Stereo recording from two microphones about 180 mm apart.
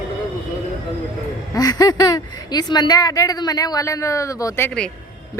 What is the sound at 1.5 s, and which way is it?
A woman's voice, 20° left (ahead or behind).